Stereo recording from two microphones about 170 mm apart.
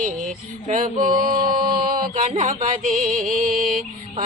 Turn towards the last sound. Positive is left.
turn(degrees=-50)  # may be behind; listen again after turning